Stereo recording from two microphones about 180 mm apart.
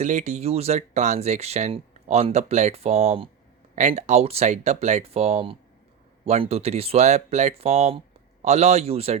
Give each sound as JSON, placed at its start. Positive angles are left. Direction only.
{"t": 0.0, "sound": "speech", "side_deg": -40}